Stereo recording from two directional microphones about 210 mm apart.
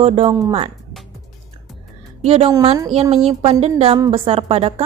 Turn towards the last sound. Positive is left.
turn(degrees=-30)  # may be behind; listen again after turning